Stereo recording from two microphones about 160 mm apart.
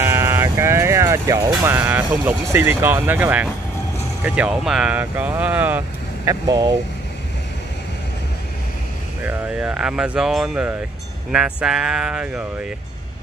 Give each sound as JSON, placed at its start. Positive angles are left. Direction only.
{"t": 0.0, "sound": "music", "side_deg": -15}
{"t": 1.6, "sound": "speech", "side_deg": -15}
{"t": 6.4, "sound": "speech", "side_deg": -25}
{"t": 9.2, "sound": "speech", "side_deg": -10}